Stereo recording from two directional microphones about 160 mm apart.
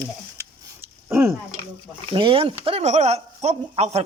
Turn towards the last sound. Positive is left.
turn(degrees=-40)  # may be behind; listen again after turning